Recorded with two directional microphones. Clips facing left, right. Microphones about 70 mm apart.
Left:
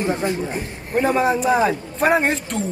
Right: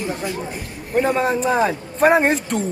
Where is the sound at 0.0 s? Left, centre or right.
Left.